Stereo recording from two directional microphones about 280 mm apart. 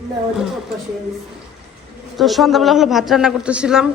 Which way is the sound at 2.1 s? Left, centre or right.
Centre.